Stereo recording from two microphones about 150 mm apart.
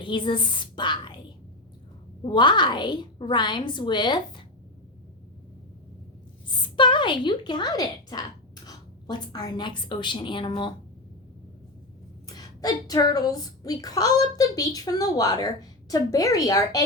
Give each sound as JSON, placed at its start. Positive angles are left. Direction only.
{"t": 0.0, "sound": "a woman's voice", "side_deg": 35}
{"t": 2.2, "sound": "a woman's voice", "side_deg": 30}
{"t": 6.5, "sound": "a woman's voice", "side_deg": 30}
{"t": 12.2, "sound": "a woman's voice", "side_deg": 25}